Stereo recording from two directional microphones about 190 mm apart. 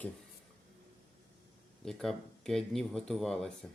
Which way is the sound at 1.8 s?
Centre (ahead or behind).